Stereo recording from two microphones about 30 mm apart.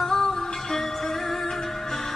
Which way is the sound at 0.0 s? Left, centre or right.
Centre.